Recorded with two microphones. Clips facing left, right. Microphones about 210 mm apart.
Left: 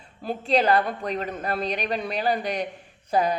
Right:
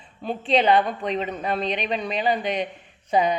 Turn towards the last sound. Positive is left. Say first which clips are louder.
# right 2 dB
turn(degrees=5)  # may be behind; listen again after turning